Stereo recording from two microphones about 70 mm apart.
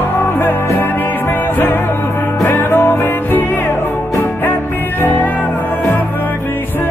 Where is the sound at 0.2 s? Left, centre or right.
Left.